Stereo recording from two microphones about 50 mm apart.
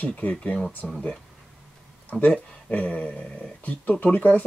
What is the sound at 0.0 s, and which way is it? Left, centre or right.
Speech, left.